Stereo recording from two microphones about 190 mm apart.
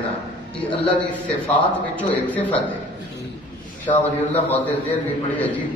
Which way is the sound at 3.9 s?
35° left (ahead or behind).